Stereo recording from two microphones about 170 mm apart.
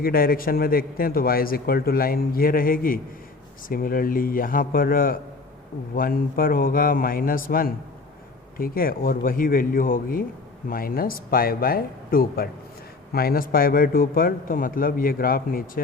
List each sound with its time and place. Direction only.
0.0 s a man's voice: 60° left (ahead or behind)